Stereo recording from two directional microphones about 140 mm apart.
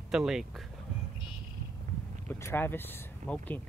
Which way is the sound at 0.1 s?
5° right (ahead or behind).